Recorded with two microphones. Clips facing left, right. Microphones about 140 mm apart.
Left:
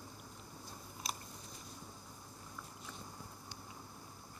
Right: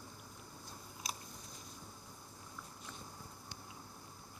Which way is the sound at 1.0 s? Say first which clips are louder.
Left 2 dB; centre (ahead or behind).